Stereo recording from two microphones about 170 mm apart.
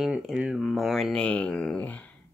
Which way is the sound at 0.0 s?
5° right (ahead or behind).